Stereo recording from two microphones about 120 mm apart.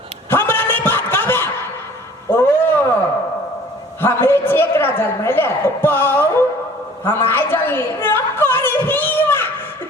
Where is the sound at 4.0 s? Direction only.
20° left (ahead or behind).